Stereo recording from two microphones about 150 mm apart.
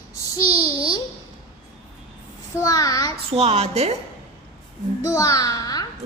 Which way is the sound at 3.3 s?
40° right (ahead or behind).